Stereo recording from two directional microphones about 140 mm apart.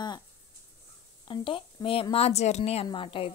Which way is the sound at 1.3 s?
35° left (ahead or behind).